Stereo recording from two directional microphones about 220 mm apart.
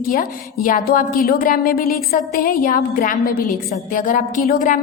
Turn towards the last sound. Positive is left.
turn(degrees=35)  # may be behind; listen again after turning